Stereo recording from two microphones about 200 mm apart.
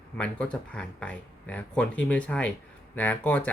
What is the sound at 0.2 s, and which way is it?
Speech, 5° left (ahead or behind).